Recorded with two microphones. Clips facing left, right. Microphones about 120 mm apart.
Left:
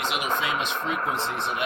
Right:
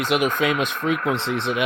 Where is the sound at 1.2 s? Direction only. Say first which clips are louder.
Right 5 dB; 80° right.